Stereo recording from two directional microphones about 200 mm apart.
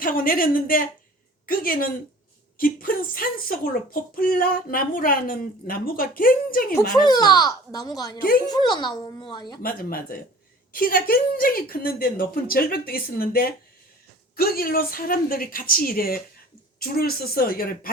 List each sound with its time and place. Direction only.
0.0 s speech: 45° left (ahead or behind)
7.0 s a child's voice: 20° left (ahead or behind)
9.6 s speech: 45° left (ahead or behind)